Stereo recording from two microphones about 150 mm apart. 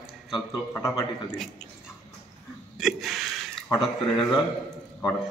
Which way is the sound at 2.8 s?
Centre (ahead or behind).